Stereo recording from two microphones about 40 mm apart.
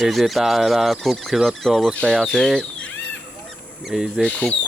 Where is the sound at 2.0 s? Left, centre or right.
Centre.